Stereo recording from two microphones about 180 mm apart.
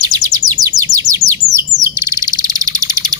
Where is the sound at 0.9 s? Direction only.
20° right (ahead or behind).